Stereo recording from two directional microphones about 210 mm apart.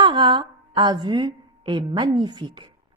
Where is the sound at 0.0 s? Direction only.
20° right (ahead or behind).